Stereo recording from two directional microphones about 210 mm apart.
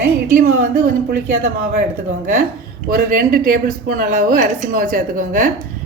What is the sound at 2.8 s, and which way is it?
Speech, 45° right (ahead or behind).